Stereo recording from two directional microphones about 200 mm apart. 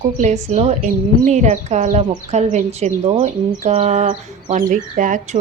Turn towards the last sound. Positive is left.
turn(degrees=-40)  # may be behind; listen again after turning